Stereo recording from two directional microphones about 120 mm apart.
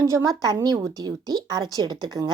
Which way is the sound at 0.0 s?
30° right (ahead or behind).